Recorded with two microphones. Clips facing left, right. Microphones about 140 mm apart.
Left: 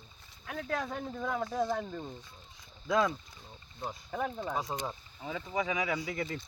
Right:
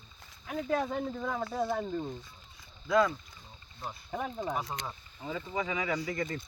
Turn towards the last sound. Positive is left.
turn(degrees=5)  # may be behind; listen again after turning